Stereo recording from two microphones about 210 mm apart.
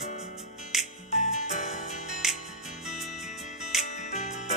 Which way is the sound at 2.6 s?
Centre (ahead or behind).